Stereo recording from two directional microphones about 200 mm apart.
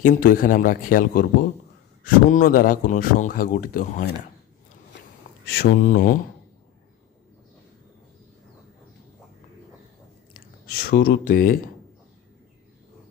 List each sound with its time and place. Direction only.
0.0 s speech: 40° left (ahead or behind)
5.6 s speech: 45° left (ahead or behind)
10.8 s speech: 50° left (ahead or behind)